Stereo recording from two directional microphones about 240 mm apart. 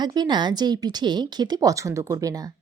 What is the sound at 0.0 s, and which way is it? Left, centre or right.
A woman's voice, centre.